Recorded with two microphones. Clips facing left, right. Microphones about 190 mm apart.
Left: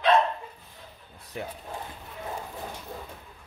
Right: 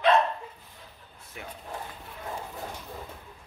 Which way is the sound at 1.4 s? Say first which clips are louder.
Left 7 dB; 35° left (ahead or behind).